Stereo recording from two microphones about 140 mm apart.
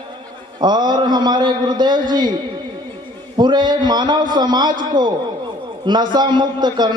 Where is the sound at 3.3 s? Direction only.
30° right (ahead or behind).